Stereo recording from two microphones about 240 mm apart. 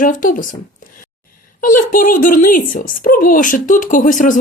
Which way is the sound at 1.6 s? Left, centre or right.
Left.